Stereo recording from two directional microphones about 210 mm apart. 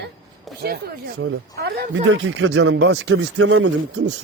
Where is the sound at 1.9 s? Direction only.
65° right (ahead or behind).